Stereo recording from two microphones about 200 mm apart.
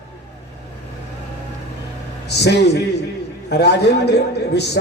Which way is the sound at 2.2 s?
55° left (ahead or behind).